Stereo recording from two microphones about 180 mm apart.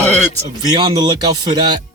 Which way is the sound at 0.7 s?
25° right (ahead or behind).